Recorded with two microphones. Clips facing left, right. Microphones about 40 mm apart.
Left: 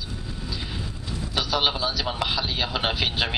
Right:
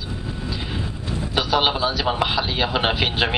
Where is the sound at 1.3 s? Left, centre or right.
Centre.